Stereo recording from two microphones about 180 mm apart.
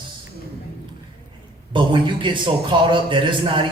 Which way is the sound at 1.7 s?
25° right (ahead or behind).